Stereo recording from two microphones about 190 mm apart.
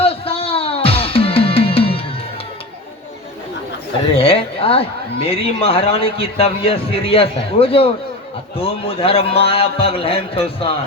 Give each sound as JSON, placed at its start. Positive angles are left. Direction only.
{"t": 0.0, "sound": "music", "side_deg": 30}
{"t": 4.2, "sound": "a man's voice", "side_deg": 30}